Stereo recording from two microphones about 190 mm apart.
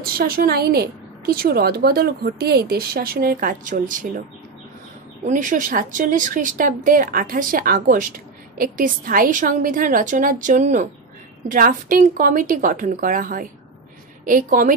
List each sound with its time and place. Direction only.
0.0 s a woman's voice: 50° right (ahead or behind)
5.2 s a woman's voice: 40° right (ahead or behind)